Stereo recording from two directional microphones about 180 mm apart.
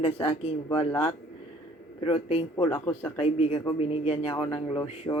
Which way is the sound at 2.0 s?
30° left (ahead or behind).